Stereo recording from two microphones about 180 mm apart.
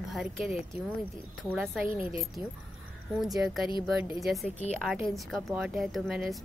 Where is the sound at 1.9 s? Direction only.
30° left (ahead or behind).